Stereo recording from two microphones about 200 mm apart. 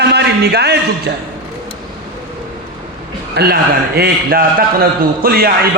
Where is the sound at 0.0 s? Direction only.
55° right (ahead or behind).